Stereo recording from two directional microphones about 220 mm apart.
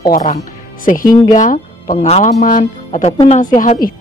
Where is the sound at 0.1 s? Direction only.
35° left (ahead or behind).